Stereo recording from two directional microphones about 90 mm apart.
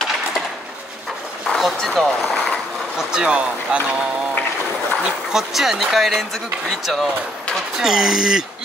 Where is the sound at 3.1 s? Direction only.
10° right (ahead or behind).